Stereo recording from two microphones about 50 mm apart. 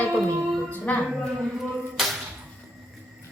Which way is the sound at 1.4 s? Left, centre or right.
Centre.